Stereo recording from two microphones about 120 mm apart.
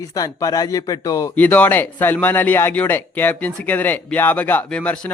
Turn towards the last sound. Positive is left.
turn(degrees=10)  # may be behind; listen again after turning